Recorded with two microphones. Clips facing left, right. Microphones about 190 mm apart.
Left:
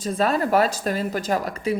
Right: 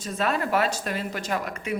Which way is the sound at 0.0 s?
35° left (ahead or behind).